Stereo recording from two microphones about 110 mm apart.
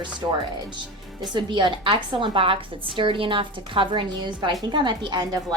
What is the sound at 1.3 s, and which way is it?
A woman's voice, 45° right (ahead or behind).